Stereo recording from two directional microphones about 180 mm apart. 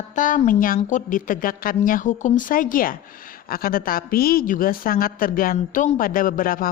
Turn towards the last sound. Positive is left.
turn(degrees=50)  # may be behind; listen again after turning